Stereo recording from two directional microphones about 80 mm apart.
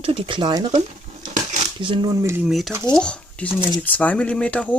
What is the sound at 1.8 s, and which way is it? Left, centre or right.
Speech, right.